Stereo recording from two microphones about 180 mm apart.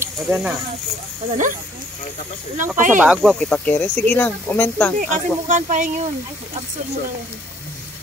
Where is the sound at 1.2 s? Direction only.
35° right (ahead or behind).